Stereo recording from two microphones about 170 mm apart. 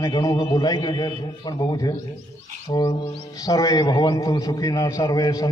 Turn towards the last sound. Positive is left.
turn(degrees=20)  # may be behind; listen again after turning